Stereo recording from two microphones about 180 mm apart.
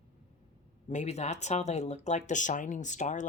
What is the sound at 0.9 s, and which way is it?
Speech, 40° left (ahead or behind).